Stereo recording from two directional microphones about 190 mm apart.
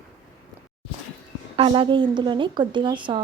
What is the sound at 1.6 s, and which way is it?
A woman's voice, 25° right (ahead or behind).